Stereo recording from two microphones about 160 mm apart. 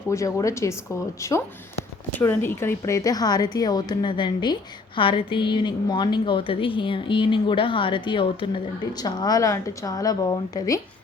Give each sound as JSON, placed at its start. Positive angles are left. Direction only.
{"t": 0.1, "sound": "a woman's voice", "side_deg": 20}